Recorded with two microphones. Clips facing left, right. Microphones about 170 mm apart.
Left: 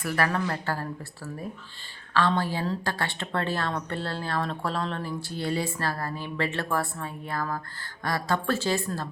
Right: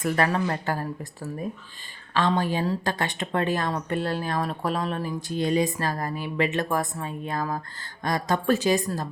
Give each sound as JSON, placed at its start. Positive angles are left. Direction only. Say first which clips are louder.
{"t": 0.0, "sound": "speech", "louder": "right 3 dB", "side_deg": -20}